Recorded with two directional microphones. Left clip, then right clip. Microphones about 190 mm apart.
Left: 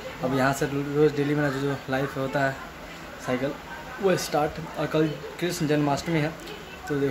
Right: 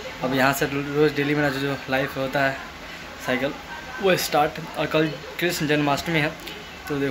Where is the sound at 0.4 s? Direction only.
Centre (ahead or behind).